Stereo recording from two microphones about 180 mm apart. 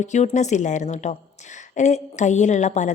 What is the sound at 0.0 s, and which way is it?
A woman's voice, 40° left (ahead or behind).